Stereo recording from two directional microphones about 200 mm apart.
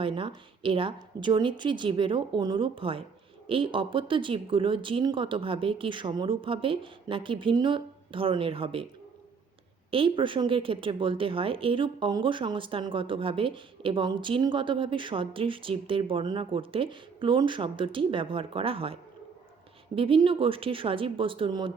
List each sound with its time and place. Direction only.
0.0 s a woman's voice: 25° right (ahead or behind)
9.9 s a woman's voice: 25° right (ahead or behind)
20.0 s a woman's voice: 25° right (ahead or behind)